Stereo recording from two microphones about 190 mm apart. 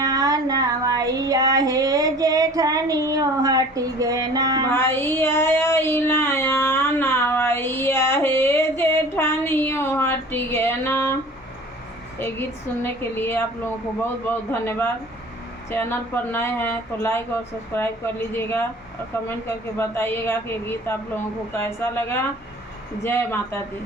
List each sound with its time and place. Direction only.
0.0 s child singing: 20° right (ahead or behind)
4.7 s child singing: 10° left (ahead or behind)
12.2 s speech: 10° left (ahead or behind)